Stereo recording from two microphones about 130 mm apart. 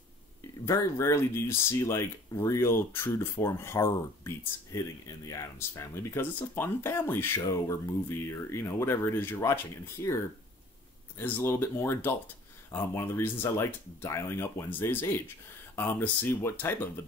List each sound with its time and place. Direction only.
0.7 s speech: 25° left (ahead or behind)